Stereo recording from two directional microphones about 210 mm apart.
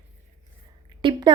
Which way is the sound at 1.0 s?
25° right (ahead or behind).